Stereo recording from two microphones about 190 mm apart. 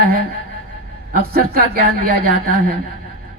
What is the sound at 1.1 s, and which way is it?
A man's voice, 50° right (ahead or behind).